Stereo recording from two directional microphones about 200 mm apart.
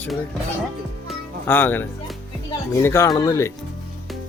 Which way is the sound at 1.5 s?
10° left (ahead or behind).